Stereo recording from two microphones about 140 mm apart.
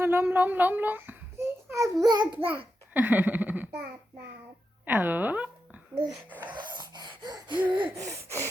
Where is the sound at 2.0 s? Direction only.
30° right (ahead or behind).